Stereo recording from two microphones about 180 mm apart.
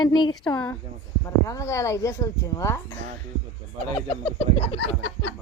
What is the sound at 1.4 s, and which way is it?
Speech, 15° left (ahead or behind).